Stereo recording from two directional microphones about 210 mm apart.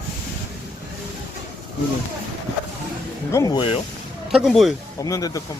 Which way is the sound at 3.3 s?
20° left (ahead or behind).